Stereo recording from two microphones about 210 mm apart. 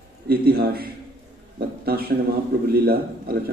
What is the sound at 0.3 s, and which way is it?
Speech, 45° right (ahead or behind).